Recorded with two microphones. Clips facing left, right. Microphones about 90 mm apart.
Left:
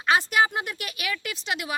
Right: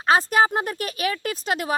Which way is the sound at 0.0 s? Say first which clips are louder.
Right 3 dB; 40° right (ahead or behind).